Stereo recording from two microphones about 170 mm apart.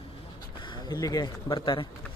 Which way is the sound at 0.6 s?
25° left (ahead or behind).